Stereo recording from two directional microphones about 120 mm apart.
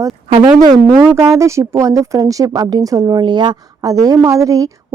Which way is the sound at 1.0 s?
25° right (ahead or behind).